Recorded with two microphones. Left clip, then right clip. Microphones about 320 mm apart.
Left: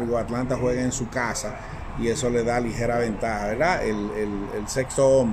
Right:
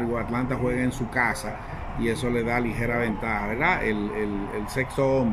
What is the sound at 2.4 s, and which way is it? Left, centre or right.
Speech, centre.